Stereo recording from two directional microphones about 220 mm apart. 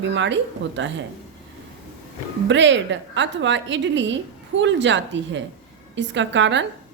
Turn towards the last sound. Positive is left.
turn(degrees=-55)  # may be behind; listen again after turning